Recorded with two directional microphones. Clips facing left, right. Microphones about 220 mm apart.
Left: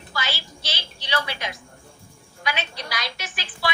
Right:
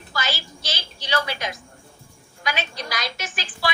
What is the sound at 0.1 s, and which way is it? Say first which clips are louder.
A woman's voice: right 2 dB; 45° right (ahead or behind).